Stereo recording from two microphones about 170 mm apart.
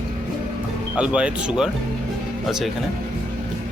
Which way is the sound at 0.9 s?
5° right (ahead or behind).